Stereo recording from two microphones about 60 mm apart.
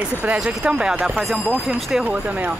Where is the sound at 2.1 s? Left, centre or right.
Right.